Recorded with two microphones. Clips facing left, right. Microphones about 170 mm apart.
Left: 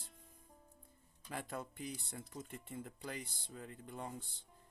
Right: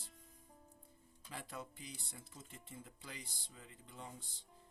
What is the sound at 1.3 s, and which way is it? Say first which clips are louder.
Speech: left 5 dB; 55° left (ahead or behind).